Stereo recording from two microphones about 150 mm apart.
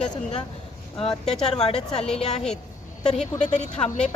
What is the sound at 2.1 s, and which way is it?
Speech, 45° left (ahead or behind).